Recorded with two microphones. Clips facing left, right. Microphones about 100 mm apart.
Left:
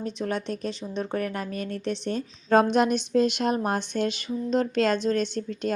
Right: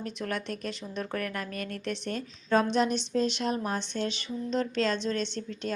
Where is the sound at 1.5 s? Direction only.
50° right (ahead or behind).